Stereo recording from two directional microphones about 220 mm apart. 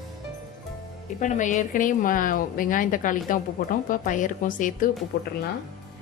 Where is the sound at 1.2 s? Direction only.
35° left (ahead or behind).